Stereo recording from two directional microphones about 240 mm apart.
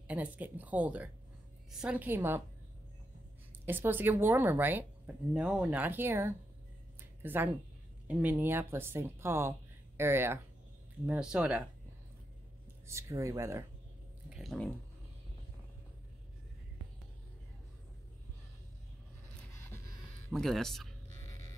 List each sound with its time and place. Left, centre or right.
0.1 s a woman's voice: centre
3.6 s a woman's voice: centre
7.0 s a sound: centre
8.1 s a woman's voice: centre
12.8 s a woman's voice: centre
14.3 s speech: centre
20.2 s speech: centre